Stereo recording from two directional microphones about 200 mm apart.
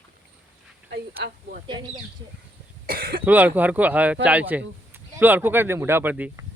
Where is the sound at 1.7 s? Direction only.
25° right (ahead or behind).